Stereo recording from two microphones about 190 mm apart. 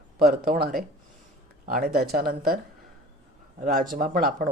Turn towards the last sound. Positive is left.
turn(degrees=-45)  # may be behind; listen again after turning